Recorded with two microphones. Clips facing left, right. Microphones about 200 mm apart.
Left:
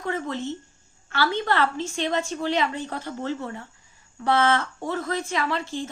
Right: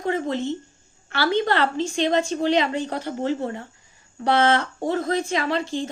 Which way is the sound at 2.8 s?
30° right (ahead or behind).